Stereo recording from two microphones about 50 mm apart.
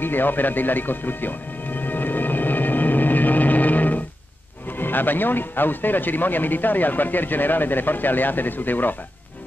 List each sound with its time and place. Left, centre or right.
0.0 s music: left
4.7 s speech: left